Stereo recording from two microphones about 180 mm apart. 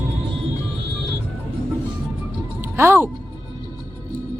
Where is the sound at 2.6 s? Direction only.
15° right (ahead or behind).